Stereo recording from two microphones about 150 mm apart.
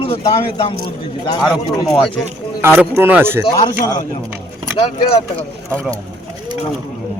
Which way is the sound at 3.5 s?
25° left (ahead or behind).